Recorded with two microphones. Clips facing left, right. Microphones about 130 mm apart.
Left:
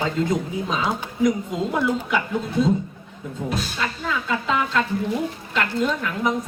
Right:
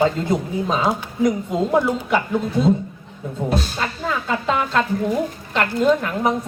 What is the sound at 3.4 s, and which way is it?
Speech, 35° right (ahead or behind).